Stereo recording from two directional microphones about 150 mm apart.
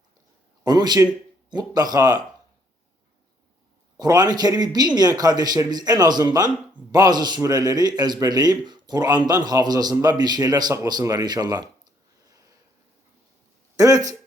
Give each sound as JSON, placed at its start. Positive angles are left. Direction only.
{"t": 0.6, "sound": "a man's voice", "side_deg": -30}
{"t": 3.9, "sound": "a man's voice", "side_deg": -25}
{"t": 13.7, "sound": "speech", "side_deg": -25}